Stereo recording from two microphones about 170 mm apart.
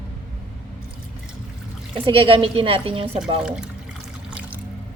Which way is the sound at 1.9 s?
30° right (ahead or behind).